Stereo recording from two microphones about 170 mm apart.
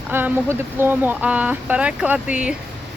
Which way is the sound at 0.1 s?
10° right (ahead or behind).